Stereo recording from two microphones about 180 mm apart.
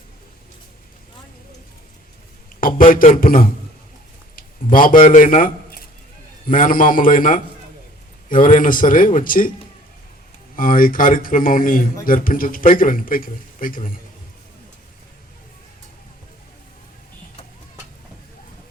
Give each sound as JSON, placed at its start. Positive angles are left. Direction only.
{"t": 2.6, "sound": "speech", "side_deg": 50}
{"t": 4.4, "sound": "a sound", "side_deg": 50}
{"t": 6.5, "sound": "speech", "side_deg": 50}
{"t": 10.5, "sound": "speech", "side_deg": 50}